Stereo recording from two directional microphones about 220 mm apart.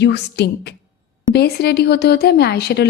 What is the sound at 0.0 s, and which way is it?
A woman's voice, 50° left (ahead or behind).